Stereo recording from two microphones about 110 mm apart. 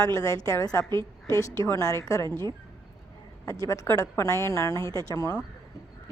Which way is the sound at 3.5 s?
30° left (ahead or behind).